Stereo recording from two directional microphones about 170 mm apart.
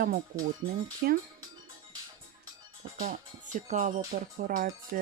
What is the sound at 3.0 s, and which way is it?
Music, 50° right (ahead or behind).